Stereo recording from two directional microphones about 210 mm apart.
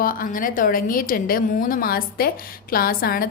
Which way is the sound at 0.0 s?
40° left (ahead or behind).